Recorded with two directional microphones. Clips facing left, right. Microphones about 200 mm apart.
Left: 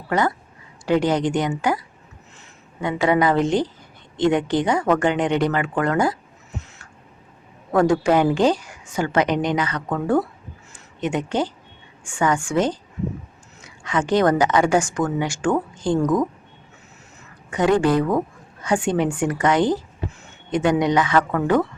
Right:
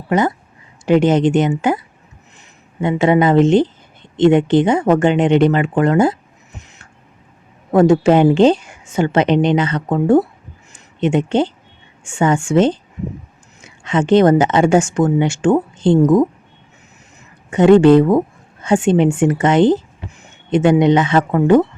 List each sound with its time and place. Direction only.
0.1 s speech: 20° right (ahead or behind)
2.8 s speech: 25° right (ahead or behind)
17.5 s speech: 25° right (ahead or behind)